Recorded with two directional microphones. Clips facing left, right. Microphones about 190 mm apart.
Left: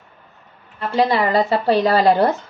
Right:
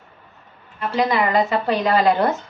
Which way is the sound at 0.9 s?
30° left (ahead or behind).